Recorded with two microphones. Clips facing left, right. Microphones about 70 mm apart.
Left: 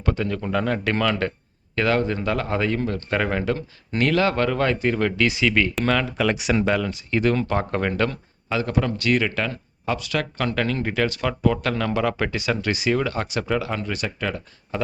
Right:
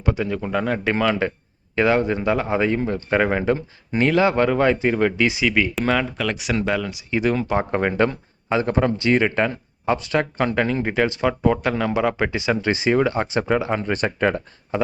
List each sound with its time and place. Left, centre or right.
0.0 s speech: centre
6.1 s speech: centre; by 14.8 s right